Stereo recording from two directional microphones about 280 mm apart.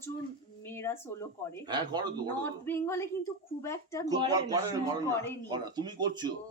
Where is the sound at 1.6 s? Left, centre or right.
Centre.